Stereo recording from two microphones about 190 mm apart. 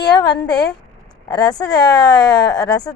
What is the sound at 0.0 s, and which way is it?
Speech, 20° left (ahead or behind).